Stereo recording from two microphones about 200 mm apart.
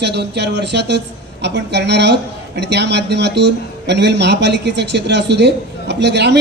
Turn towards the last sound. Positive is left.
turn(degrees=-60)  # may be behind; listen again after turning